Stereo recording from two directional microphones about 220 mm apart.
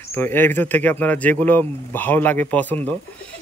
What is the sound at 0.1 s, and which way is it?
Speech, 10° left (ahead or behind).